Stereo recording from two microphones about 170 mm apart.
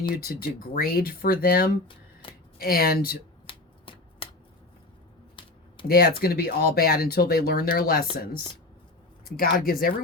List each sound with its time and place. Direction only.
0.1 s speech: 60° left (ahead or behind)
3.4 s shuffling cards: 30° left (ahead or behind)
5.4 s a sound: 30° left (ahead or behind)
5.9 s speech: 65° left (ahead or behind)
9.2 s speech: 60° left (ahead or behind)